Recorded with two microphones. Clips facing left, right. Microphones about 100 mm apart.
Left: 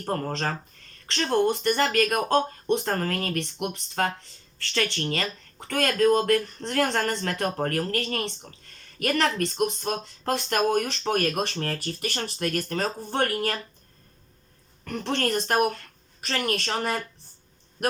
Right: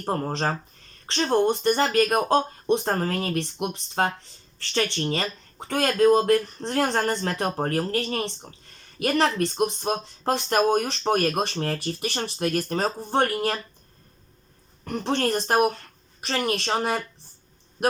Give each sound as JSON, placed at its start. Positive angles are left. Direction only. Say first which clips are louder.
{"t": 0.1, "sound": "speech", "louder": "right 2 dB", "side_deg": -25}
{"t": 14.8, "sound": "speech", "louder": "right 2 dB", "side_deg": -30}